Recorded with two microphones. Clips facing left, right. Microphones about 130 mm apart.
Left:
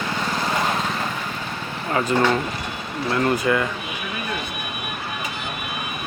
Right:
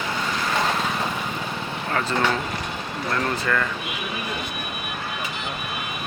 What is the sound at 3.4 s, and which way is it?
Speech, 15° left (ahead or behind).